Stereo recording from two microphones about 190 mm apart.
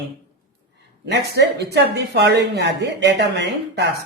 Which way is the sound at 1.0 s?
60° right (ahead or behind).